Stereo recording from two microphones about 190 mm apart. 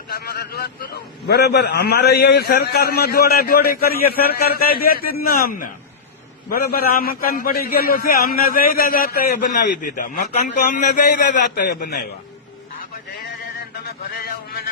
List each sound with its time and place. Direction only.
0.1 s a man's voice: 55° left (ahead or behind)
14.2 s speech: 55° left (ahead or behind)